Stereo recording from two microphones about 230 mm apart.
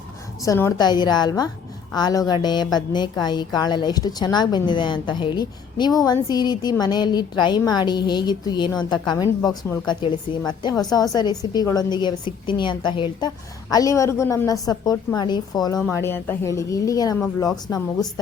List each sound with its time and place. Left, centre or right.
0.4 s a woman's voice: centre